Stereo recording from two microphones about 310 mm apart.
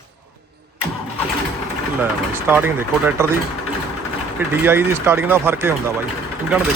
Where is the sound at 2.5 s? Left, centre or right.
Centre.